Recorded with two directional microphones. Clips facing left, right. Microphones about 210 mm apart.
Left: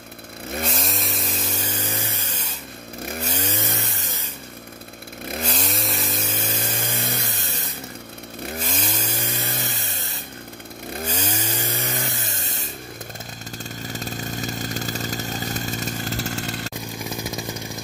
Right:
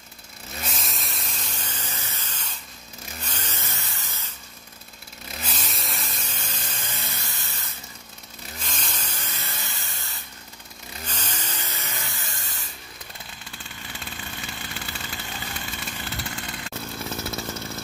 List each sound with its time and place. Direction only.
0.7 s chainsaw: centre (ahead or behind)
1.6 s vehicle: 10° left (ahead or behind)
5.3 s chainsaw: 55° left (ahead or behind)
5.7 s a sound: centre (ahead or behind); by 7.7 s 15° left (ahead or behind)
8.7 s a sound: 10° left (ahead or behind)
11.1 s chainsaw: 10° left (ahead or behind)
12.0 s vehicle: 20° left (ahead or behind)
13.6 s motorcycle: 40° left (ahead or behind)
16.7 s chainsaw: 15° left (ahead or behind)